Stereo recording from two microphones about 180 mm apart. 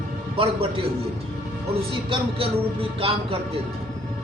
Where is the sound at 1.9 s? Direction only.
30° right (ahead or behind).